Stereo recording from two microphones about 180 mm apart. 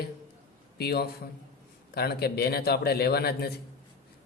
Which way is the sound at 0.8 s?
60° left (ahead or behind).